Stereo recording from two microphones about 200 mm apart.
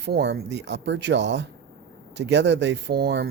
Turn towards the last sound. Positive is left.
turn(degrees=-55)  # may be behind; listen again after turning